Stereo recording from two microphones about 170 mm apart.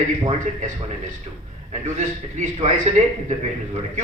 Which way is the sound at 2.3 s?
45° right (ahead or behind).